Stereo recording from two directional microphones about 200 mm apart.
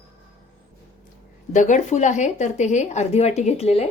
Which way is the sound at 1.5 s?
40° left (ahead or behind).